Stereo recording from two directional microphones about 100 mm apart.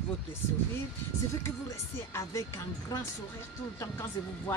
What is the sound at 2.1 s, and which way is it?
Speech, 30° left (ahead or behind).